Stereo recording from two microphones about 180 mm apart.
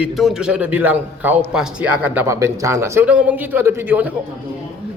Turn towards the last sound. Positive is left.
turn(degrees=-10)  # may be behind; listen again after turning